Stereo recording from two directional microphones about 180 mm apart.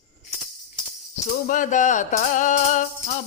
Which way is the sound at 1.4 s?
45° left (ahead or behind).